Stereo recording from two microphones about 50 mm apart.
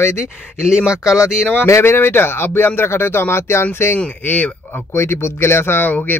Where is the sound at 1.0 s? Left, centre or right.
Left.